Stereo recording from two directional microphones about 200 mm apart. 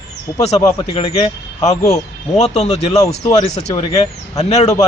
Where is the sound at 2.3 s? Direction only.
35° left (ahead or behind).